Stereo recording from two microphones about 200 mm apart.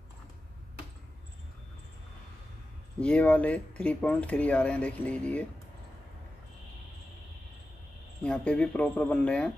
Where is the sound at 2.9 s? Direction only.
5° left (ahead or behind).